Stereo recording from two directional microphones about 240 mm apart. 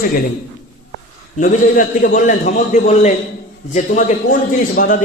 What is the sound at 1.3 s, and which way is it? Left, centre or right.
A man's voice, left.